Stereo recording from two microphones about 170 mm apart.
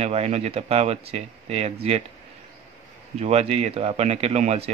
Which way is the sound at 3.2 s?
40° right (ahead or behind).